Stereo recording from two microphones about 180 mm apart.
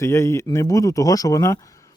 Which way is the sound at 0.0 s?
15° left (ahead or behind).